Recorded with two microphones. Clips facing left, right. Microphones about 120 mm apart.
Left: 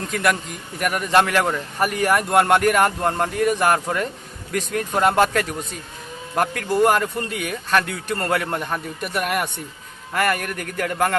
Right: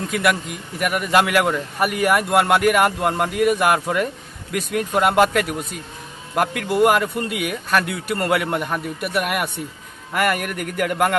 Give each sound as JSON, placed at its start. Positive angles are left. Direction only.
{"t": 0.1, "sound": "a man's voice", "side_deg": -5}